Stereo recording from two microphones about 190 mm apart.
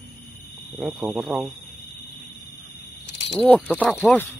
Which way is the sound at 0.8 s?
Centre (ahead or behind).